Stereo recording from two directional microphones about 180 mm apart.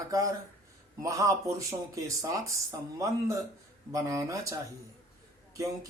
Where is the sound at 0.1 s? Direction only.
20° right (ahead or behind).